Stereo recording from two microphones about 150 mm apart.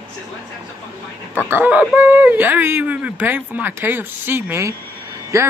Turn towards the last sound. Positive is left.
turn(degrees=-20)  # may be behind; listen again after turning